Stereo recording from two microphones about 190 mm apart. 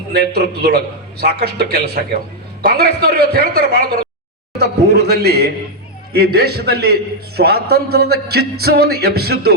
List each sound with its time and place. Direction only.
0.1 s a man's voice: 55° right (ahead or behind)